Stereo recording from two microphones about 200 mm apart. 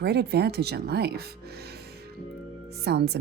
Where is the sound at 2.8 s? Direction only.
55° right (ahead or behind).